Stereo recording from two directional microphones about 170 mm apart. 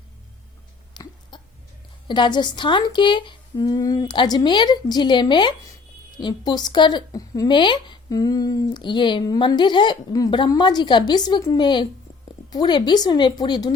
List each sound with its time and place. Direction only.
0.9 s hiccup: 25° left (ahead or behind)
1.3 s a sound: 25° left (ahead or behind)
2.0 s a woman's voice: 25° left (ahead or behind)